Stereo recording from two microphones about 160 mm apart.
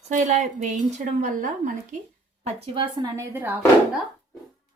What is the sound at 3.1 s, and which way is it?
Speech, 15° right (ahead or behind).